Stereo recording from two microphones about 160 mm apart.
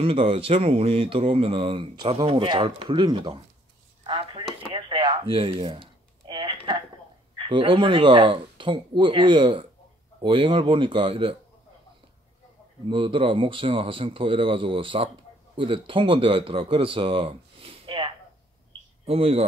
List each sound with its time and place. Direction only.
0.0 s speech: 35° right (ahead or behind)
4.0 s a sound: 30° right (ahead or behind)
7.3 s speech: 30° right (ahead or behind)
12.9 s speech: 35° right (ahead or behind)